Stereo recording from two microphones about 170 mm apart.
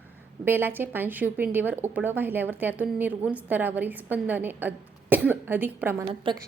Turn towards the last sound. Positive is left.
turn(degrees=-30)  # may be behind; listen again after turning